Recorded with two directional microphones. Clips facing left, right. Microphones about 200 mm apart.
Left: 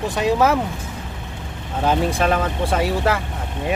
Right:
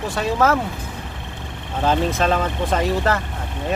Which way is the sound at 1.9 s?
10° left (ahead or behind).